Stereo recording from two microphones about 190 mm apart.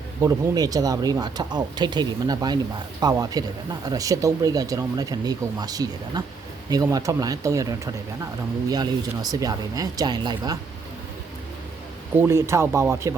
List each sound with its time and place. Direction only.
0.2 s speech: 20° right (ahead or behind)
8.7 s speech: 20° right (ahead or behind)
12.2 s speech: 15° right (ahead or behind)